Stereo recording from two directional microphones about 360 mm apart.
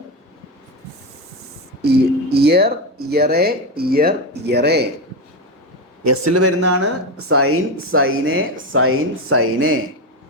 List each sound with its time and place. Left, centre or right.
1.8 s speech: right
6.1 s speech: right